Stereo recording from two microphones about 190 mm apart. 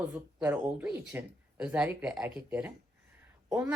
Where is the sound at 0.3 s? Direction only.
5° right (ahead or behind).